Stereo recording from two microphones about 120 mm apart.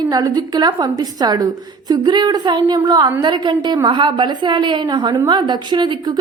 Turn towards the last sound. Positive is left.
turn(degrees=-40)  # may be behind; listen again after turning